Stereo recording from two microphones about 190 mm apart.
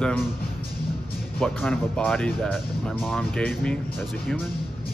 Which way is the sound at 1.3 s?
5° left (ahead or behind).